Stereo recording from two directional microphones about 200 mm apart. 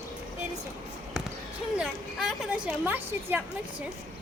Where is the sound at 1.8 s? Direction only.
Centre (ahead or behind).